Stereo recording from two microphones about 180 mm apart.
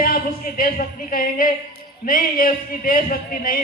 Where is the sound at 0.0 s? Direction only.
50° left (ahead or behind).